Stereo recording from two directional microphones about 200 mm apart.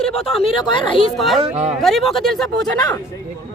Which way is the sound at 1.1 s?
Centre (ahead or behind).